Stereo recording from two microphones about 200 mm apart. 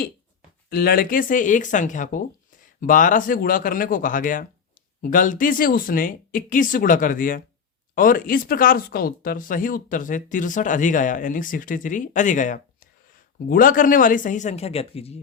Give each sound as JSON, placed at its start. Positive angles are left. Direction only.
{"t": 0.7, "sound": "speech", "side_deg": 50}